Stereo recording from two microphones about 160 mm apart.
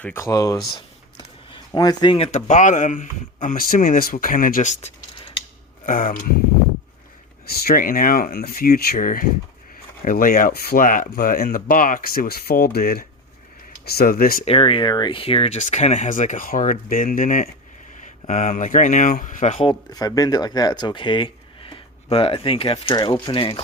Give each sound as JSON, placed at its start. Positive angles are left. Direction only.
{"t": 0.0, "sound": "speech", "side_deg": 15}
{"t": 1.7, "sound": "speech", "side_deg": 25}
{"t": 5.8, "sound": "speech", "side_deg": 60}
{"t": 7.4, "sound": "speech", "side_deg": 75}
{"t": 14.4, "sound": "speech", "side_deg": 35}
{"t": 19.5, "sound": "speech", "side_deg": 30}